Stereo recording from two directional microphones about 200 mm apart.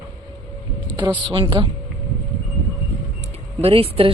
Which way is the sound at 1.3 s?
25° right (ahead or behind).